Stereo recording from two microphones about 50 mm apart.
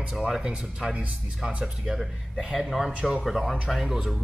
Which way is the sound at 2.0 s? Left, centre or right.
Centre.